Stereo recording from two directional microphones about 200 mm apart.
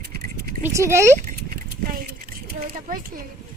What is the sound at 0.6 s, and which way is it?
Speech, 15° right (ahead or behind).